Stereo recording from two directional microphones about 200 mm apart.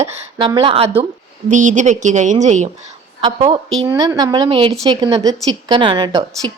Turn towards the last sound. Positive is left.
turn(degrees=-20)  # may be behind; listen again after turning